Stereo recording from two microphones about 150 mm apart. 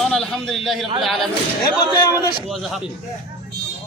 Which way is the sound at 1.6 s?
25° left (ahead or behind).